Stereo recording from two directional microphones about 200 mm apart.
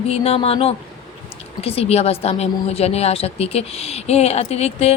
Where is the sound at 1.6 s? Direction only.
30° left (ahead or behind).